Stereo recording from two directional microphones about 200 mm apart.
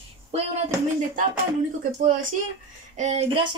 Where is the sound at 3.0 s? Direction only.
35° right (ahead or behind).